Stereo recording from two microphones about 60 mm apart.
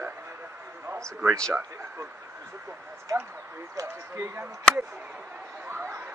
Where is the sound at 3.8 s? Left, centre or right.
Right.